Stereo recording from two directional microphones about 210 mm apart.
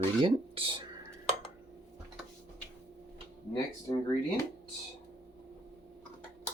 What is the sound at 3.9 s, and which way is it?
Speech, 20° left (ahead or behind).